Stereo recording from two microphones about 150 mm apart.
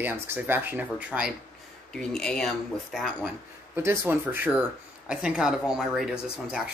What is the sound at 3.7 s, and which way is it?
Speech, 15° right (ahead or behind).